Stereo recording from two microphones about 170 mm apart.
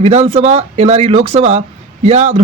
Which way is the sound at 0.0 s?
35° right (ahead or behind).